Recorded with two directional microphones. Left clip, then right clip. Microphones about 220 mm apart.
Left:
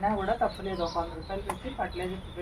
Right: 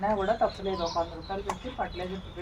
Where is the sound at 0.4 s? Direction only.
5° right (ahead or behind).